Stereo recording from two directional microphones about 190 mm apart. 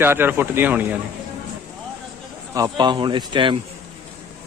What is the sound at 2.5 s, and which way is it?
Speech, 20° right (ahead or behind).